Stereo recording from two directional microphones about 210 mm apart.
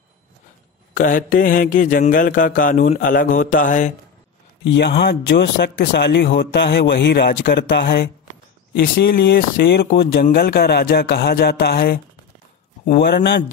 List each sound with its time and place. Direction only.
0.9 s mantra: 40° left (ahead or behind)
4.6 s a man's voice: 55° left (ahead or behind)